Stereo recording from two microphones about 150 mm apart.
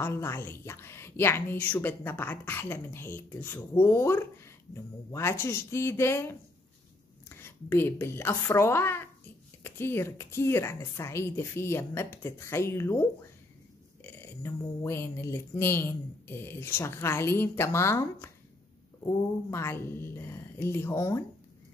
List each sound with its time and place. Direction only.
0.0 s a woman's voice: 20° left (ahead or behind)
14.0 s speech: 15° left (ahead or behind)